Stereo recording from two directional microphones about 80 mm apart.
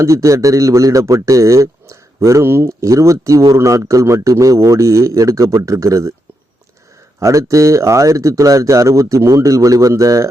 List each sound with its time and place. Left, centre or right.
0.0 s speech: right
7.2 s speech: right